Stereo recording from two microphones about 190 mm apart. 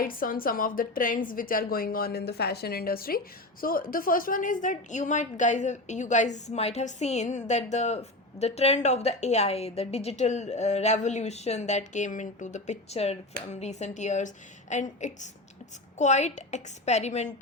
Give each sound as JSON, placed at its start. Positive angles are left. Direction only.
{"t": 0.0, "sound": "a woman's voice", "side_deg": 50}